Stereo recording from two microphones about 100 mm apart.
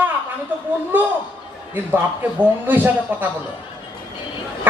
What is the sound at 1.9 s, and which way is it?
A man's voice, 20° right (ahead or behind).